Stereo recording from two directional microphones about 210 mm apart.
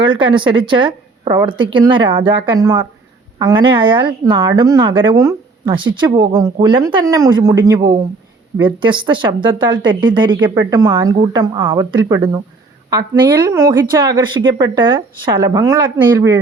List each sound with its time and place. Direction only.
0.0 s speech: 25° right (ahead or behind)